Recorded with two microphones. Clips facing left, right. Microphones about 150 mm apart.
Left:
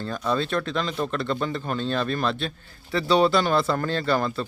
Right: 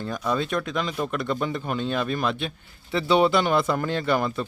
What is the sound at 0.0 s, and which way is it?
Speech, 10° right (ahead or behind).